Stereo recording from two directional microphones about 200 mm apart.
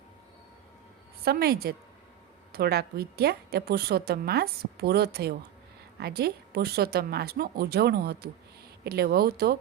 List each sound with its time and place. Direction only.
1.2 s a woman's voice: 50° right (ahead or behind)